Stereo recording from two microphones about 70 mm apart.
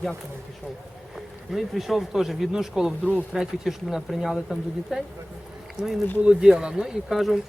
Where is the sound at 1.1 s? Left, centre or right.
Centre.